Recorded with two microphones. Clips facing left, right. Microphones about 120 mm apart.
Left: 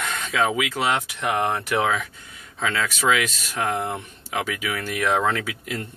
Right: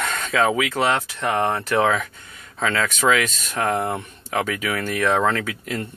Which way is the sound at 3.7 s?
40° right (ahead or behind).